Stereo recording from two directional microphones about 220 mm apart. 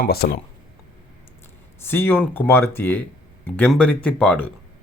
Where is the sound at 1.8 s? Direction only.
10° left (ahead or behind).